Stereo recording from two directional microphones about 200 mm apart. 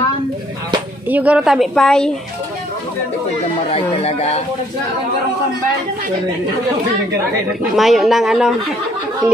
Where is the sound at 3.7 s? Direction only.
30° left (ahead or behind).